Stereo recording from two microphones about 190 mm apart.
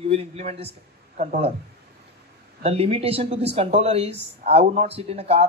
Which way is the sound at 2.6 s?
30° right (ahead or behind).